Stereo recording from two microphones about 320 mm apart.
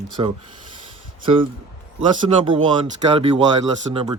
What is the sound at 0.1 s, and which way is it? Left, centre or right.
Speech, centre.